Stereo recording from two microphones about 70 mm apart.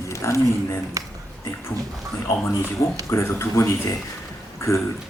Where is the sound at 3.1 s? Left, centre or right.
Left.